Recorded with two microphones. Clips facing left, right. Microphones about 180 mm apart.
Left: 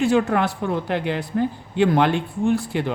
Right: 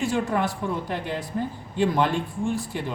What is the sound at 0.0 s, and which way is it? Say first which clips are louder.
Speech: left 6 dB; 65° left (ahead or behind).